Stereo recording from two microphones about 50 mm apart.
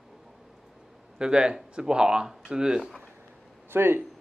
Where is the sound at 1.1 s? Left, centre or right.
Centre.